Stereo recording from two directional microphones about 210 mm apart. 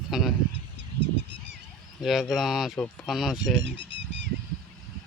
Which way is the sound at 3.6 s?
60° right (ahead or behind).